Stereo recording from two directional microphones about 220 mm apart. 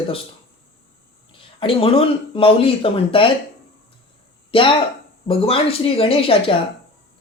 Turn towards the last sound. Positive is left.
turn(degrees=25)  # may be behind; listen again after turning